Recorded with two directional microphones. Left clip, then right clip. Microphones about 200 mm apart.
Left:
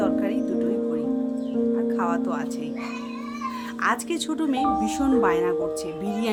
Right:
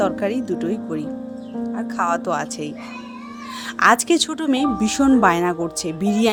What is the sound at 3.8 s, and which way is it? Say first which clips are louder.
Speech: right 10 dB; 35° right (ahead or behind).